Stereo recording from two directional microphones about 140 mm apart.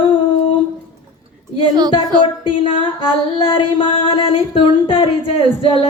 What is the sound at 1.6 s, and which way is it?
Speech, 30° right (ahead or behind).